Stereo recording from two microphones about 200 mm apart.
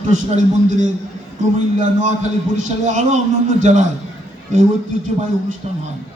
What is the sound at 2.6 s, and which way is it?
A man's voice, 35° right (ahead or behind).